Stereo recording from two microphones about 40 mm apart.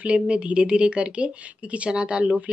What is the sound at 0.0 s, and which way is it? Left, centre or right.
Speech, right.